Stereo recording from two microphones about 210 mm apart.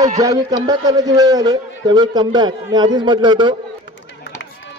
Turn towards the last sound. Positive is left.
turn(degrees=-20)  # may be behind; listen again after turning